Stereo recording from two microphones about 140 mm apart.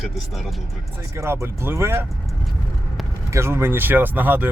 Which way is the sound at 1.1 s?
20° right (ahead or behind).